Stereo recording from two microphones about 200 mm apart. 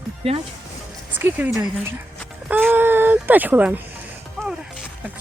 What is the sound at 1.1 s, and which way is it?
Speech, 10° right (ahead or behind).